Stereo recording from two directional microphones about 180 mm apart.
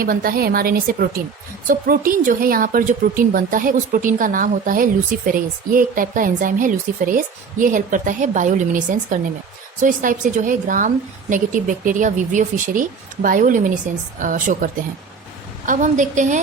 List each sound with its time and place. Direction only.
0.0 s a woman's voice: 55° right (ahead or behind)